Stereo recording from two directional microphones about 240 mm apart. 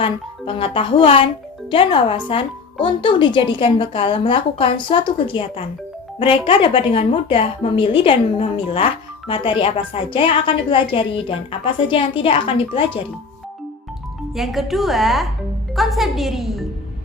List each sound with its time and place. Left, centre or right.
0.0 s a woman's voice: left
14.3 s speech: centre